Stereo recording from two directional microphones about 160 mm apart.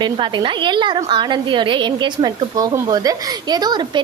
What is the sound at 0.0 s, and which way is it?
A woman's voice, 30° right (ahead or behind).